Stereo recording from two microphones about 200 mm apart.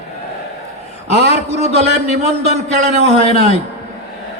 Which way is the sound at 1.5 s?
35° right (ahead or behind).